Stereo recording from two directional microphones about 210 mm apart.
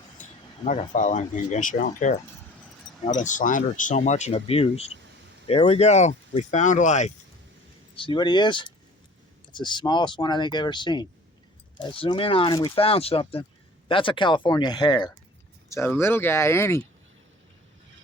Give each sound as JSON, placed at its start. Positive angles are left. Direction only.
{"t": 0.2, "sound": "speech", "side_deg": 35}
{"t": 7.9, "sound": "speech", "side_deg": 25}